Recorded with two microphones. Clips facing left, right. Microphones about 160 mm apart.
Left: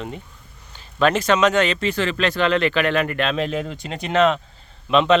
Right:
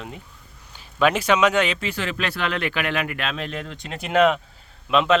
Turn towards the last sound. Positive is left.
turn(degrees=-5)  # may be behind; listen again after turning